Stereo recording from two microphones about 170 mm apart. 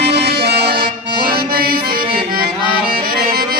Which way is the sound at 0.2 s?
70° right (ahead or behind).